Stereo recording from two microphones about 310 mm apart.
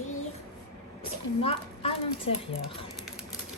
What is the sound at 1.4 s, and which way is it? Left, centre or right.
Speech, centre.